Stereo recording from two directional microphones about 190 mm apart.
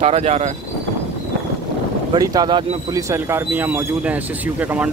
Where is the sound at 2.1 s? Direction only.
20° right (ahead or behind).